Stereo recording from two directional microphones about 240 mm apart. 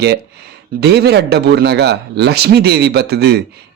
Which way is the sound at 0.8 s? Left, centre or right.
Right.